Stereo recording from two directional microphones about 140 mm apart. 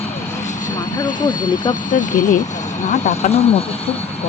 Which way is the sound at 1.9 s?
65° left (ahead or behind).